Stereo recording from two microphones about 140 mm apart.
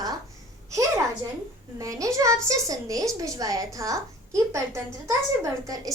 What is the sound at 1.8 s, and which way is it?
Speech, 25° right (ahead or behind).